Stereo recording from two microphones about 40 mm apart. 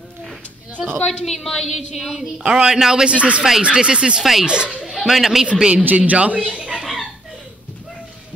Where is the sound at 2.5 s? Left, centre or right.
Centre.